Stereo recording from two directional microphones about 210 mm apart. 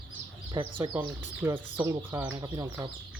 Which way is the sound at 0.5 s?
25° right (ahead or behind).